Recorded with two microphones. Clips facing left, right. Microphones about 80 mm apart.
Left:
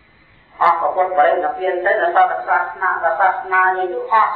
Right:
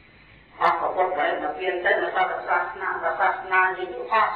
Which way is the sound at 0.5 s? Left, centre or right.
Left.